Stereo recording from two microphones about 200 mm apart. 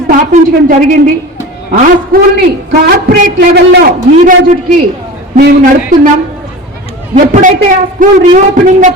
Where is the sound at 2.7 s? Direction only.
50° right (ahead or behind).